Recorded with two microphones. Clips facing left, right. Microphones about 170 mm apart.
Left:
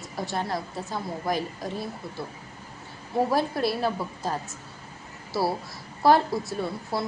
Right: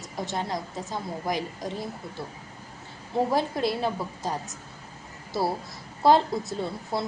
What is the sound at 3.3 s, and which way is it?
A woman's voice, 20° right (ahead or behind).